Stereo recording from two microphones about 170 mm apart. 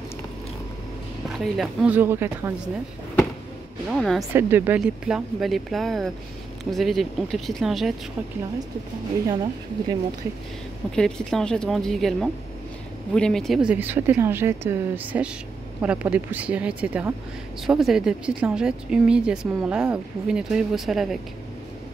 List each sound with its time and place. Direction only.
1.4 s speech: centre (ahead or behind)
3.9 s speech: centre (ahead or behind)
4.2 s speech: 15° right (ahead or behind)
9.3 s speech: 25° right (ahead or behind)
11.0 s speech: 5° left (ahead or behind)